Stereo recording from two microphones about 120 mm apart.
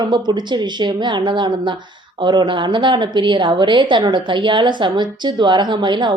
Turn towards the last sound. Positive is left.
turn(degrees=-40)  # may be behind; listen again after turning